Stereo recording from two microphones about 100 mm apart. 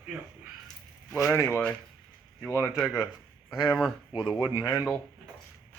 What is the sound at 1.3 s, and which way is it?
Speech, 25° left (ahead or behind).